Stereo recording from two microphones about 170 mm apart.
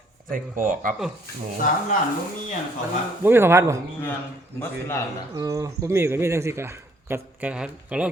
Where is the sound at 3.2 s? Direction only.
15° right (ahead or behind).